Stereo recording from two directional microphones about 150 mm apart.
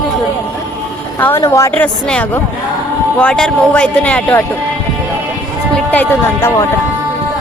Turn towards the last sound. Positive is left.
turn(degrees=15)  # may be behind; listen again after turning